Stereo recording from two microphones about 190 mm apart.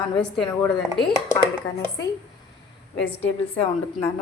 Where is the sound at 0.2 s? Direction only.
5° left (ahead or behind).